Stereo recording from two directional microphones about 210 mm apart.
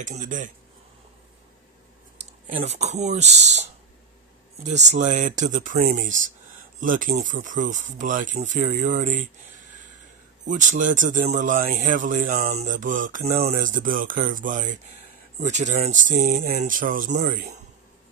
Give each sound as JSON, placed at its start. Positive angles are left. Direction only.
{"t": 0.0, "sound": "speech", "side_deg": -35}
{"t": 2.1, "sound": "speech", "side_deg": -30}
{"t": 4.6, "sound": "speech", "side_deg": -35}